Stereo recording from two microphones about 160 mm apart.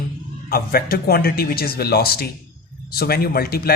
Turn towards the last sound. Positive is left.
turn(degrees=70)  # may be behind; listen again after turning